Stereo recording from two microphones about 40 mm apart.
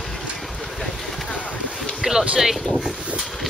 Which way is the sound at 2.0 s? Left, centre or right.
Centre.